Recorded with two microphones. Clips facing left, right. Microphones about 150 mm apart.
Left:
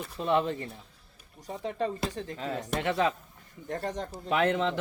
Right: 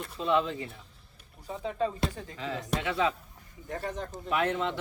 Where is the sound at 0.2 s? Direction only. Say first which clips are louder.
Left 1 dB; 55° left (ahead or behind).